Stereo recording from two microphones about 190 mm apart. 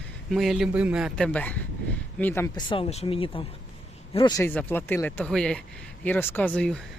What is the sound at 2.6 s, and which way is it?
Speech, 30° left (ahead or behind).